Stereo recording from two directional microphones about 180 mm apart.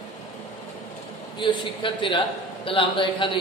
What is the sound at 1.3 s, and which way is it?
A man's voice, 25° left (ahead or behind).